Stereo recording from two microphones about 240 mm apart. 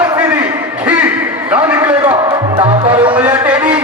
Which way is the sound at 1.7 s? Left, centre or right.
Centre.